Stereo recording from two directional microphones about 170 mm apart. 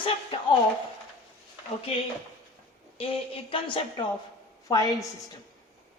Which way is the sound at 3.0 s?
35° left (ahead or behind).